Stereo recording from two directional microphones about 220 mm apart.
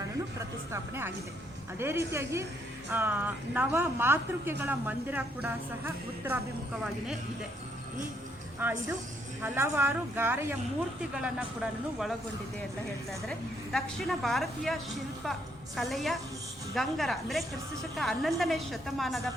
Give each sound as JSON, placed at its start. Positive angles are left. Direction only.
{"t": 0.3, "sound": "speech", "side_deg": -10}
{"t": 8.6, "sound": "a woman's voice", "side_deg": -10}
{"t": 13.7, "sound": "a woman's voice", "side_deg": 0}